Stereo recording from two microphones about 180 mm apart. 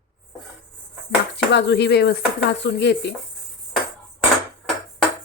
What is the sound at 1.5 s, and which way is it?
Speech, 70° left (ahead or behind).